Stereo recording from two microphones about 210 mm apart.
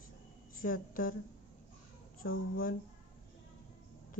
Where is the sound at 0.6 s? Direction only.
40° left (ahead or behind).